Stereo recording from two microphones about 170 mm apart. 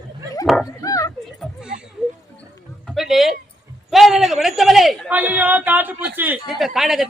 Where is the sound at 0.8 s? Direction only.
20° left (ahead or behind).